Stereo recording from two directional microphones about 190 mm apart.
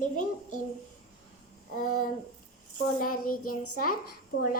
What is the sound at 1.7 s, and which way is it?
A child's voice, 45° left (ahead or behind).